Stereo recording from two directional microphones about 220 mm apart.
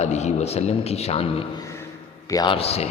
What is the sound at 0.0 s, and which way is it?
A man's voice, 30° left (ahead or behind).